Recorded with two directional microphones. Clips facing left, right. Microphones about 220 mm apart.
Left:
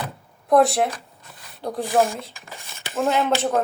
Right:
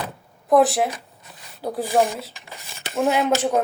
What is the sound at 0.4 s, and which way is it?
Speech, centre (ahead or behind).